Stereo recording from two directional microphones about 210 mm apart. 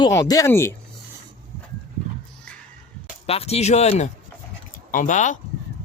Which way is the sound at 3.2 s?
30° left (ahead or behind).